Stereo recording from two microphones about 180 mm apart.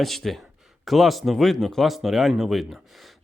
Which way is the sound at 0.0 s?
Centre (ahead or behind).